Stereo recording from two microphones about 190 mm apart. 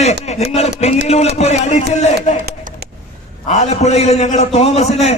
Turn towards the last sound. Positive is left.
turn(degrees=35)  # may be behind; listen again after turning